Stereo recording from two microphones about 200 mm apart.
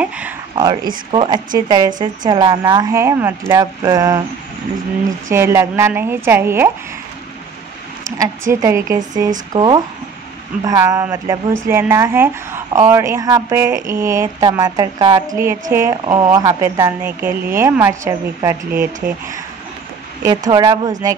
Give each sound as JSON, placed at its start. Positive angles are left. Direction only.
{"t": 0.6, "sound": "a woman's voice", "side_deg": -20}
{"t": 5.3, "sound": "a woman's voice", "side_deg": -15}
{"t": 8.2, "sound": "a woman's voice", "side_deg": -15}
{"t": 20.2, "sound": "a woman's voice", "side_deg": -20}